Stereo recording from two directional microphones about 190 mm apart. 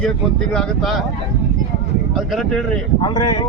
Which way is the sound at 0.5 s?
5° left (ahead or behind).